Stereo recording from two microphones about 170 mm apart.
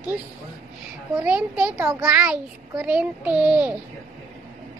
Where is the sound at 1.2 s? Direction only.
5° right (ahead or behind).